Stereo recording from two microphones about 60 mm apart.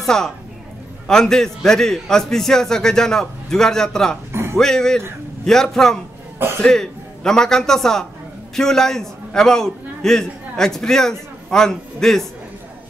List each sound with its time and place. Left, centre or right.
0.0 s a woman's voice: centre
4.3 s music: right
4.6 s a man's voice: centre